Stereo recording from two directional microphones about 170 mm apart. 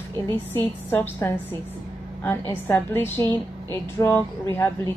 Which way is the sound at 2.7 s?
15° left (ahead or behind).